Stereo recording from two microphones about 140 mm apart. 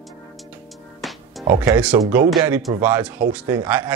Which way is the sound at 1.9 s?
20° right (ahead or behind).